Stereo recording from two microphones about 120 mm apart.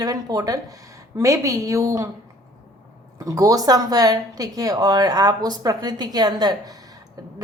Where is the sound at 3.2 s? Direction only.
30° right (ahead or behind).